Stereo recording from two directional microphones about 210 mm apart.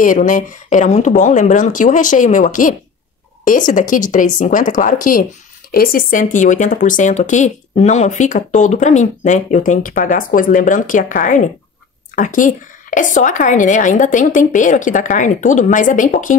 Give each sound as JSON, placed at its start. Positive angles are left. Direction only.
{"t": 0.0, "sound": "speech", "side_deg": 40}